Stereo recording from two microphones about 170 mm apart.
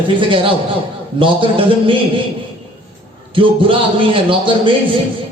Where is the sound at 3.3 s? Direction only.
30° right (ahead or behind).